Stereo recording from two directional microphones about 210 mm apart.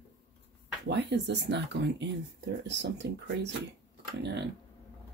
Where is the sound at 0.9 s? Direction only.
55° right (ahead or behind).